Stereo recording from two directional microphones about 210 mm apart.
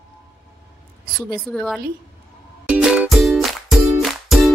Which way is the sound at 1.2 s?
Centre (ahead or behind).